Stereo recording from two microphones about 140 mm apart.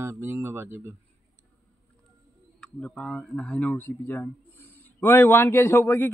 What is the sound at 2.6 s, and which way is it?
Speech, 5° left (ahead or behind).